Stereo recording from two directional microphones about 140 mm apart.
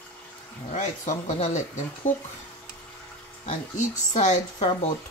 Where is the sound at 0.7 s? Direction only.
60° left (ahead or behind).